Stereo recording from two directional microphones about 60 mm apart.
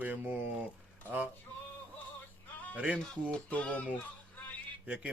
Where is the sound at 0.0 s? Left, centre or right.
Right.